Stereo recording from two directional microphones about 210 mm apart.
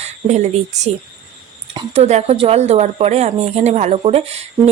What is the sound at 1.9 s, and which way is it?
Speech, 30° right (ahead or behind).